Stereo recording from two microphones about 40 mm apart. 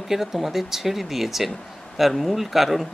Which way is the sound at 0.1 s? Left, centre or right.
Centre.